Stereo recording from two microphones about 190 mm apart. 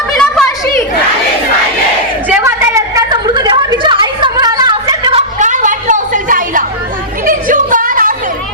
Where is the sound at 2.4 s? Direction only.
15° right (ahead or behind).